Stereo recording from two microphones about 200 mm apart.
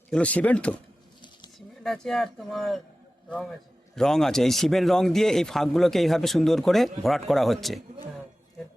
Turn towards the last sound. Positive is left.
turn(degrees=0)  # may be behind; listen again after turning